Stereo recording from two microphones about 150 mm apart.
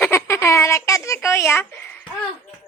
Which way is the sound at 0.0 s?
15° left (ahead or behind).